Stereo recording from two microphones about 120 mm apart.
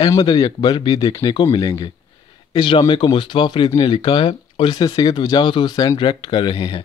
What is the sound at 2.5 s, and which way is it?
Speech, 45° left (ahead or behind).